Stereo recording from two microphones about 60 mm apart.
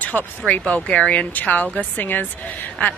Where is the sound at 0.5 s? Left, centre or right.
Left.